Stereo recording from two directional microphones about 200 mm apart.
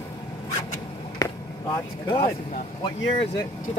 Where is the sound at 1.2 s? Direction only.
20° left (ahead or behind).